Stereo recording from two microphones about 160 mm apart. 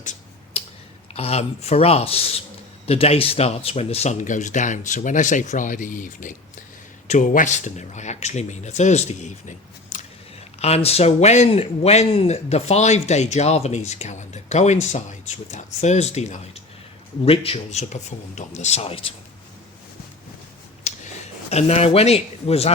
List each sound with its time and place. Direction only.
0.0 s tick-tock: 50° left (ahead or behind)
1.1 s a man's voice: 40° left (ahead or behind)
10.6 s a man's voice: 40° left (ahead or behind)
21.5 s a man's voice: 40° left (ahead or behind)